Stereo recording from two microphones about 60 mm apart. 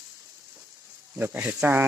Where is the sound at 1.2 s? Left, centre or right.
Right.